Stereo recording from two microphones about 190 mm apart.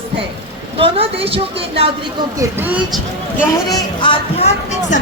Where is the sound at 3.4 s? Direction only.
20° left (ahead or behind).